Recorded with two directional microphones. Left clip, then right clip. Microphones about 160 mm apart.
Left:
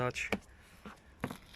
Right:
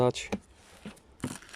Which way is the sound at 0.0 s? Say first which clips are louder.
Right 7 dB; 25° right (ahead or behind).